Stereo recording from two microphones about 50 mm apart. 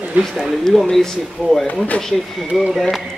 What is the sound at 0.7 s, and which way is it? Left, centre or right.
Speech, centre.